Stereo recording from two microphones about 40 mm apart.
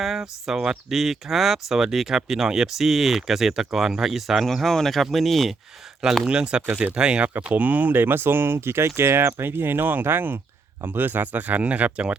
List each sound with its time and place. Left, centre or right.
0.0 s speech: centre
4.4 s speech: centre
6.2 s speech: right
7.5 s speech: right
8.0 s speech: right